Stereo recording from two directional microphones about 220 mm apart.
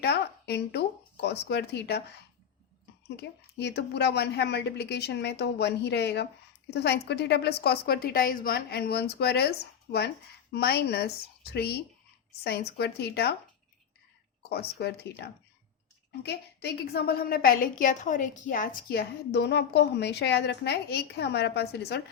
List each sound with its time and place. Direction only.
0.0 s speech: 50° left (ahead or behind)
3.2 s a woman's voice: 50° left (ahead or behind)
14.5 s a woman's voice: 45° left (ahead or behind)